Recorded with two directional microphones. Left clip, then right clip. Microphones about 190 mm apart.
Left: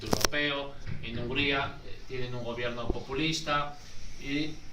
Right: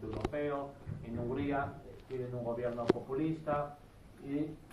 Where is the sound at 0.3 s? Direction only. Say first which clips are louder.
Left 4 dB; 20° left (ahead or behind).